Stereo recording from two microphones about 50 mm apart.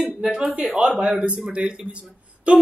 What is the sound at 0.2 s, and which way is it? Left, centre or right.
A man's voice, centre.